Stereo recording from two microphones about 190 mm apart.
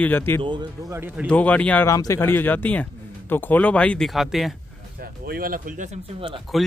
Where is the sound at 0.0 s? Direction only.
10° left (ahead or behind).